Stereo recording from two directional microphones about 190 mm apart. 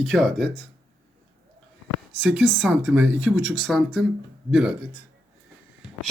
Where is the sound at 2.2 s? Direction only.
Centre (ahead or behind).